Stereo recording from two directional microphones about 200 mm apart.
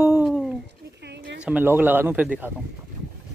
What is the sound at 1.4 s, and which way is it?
Speech, 10° right (ahead or behind).